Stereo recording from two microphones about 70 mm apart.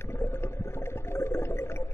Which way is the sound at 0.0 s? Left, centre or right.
Left.